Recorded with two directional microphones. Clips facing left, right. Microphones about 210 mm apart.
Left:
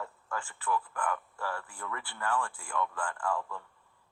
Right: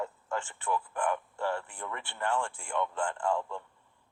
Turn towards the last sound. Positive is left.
turn(degrees=-25)  # may be behind; listen again after turning